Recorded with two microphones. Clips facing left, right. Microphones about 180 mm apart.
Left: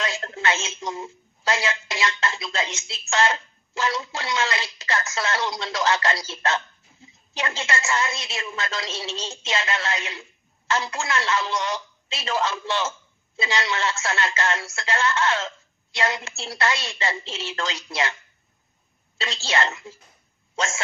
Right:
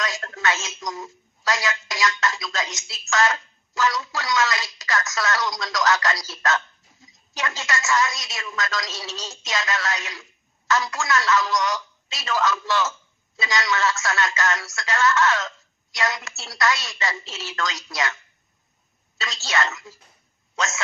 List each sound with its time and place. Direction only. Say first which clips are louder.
0.0 s a woman's voice: even; 25° left (ahead or behind)